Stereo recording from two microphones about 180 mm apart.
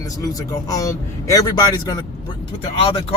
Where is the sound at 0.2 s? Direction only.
20° left (ahead or behind).